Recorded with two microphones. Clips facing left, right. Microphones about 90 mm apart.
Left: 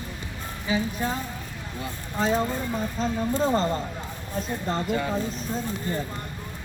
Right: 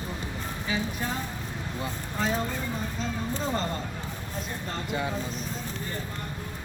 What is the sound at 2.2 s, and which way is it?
Speech, 25° left (ahead or behind).